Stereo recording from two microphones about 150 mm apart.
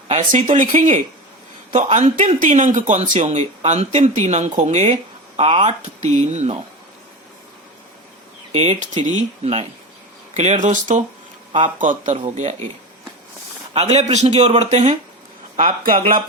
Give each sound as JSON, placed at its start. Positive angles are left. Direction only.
{"t": 0.1, "sound": "speech", "side_deg": -40}
{"t": 0.8, "sound": "speech", "side_deg": -50}
{"t": 8.5, "sound": "speech", "side_deg": -45}
{"t": 13.9, "sound": "speech", "side_deg": -50}
{"t": 15.5, "sound": "speech", "side_deg": -65}